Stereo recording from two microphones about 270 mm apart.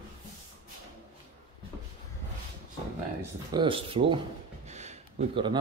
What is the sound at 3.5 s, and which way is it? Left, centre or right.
Speech, centre.